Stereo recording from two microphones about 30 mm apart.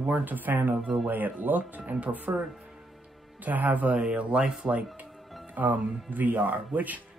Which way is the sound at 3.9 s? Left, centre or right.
Right.